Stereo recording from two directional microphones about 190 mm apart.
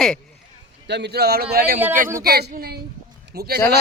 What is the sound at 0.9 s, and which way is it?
A woman's voice, 60° right (ahead or behind).